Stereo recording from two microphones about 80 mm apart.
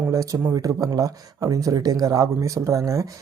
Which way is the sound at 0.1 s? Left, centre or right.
Right.